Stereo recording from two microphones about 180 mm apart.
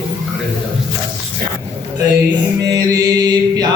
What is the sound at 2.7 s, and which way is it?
Mantra, 20° right (ahead or behind).